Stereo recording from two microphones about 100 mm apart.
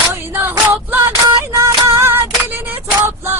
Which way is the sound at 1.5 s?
30° right (ahead or behind).